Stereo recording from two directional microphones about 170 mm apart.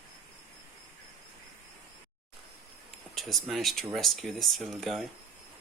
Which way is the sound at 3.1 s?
Centre (ahead or behind).